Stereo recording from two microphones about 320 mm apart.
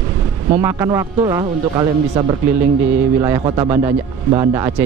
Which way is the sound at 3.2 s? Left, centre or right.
Centre.